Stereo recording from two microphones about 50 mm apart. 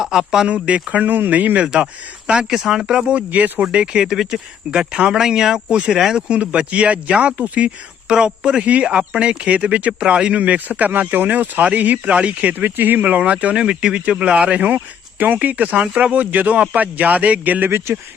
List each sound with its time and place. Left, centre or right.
0.0 s speech: centre
0.5 s speech: right
1.6 s speech: centre
2.5 s speech: centre
6.1 s speech: right
12.6 s speech: right
13.1 s speech: right
17.7 s speech: right